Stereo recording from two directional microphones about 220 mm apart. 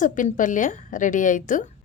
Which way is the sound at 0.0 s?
35° left (ahead or behind).